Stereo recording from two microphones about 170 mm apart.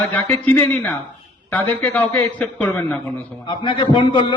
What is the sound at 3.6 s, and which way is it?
Speech, 30° left (ahead or behind).